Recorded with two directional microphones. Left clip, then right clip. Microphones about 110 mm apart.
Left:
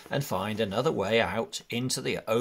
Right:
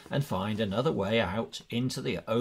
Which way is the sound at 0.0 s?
30° left (ahead or behind).